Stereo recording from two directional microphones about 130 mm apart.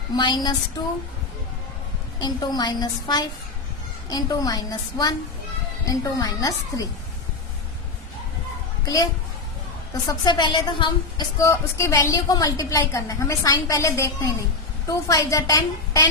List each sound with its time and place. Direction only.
0.2 s a woman's voice: 35° left (ahead or behind)
2.2 s a woman's voice: 30° left (ahead or behind)
8.8 s a child's voice: 30° left (ahead or behind)
10.1 s a woman's voice: 35° left (ahead or behind)
11.3 s a woman's voice: 25° left (ahead or behind)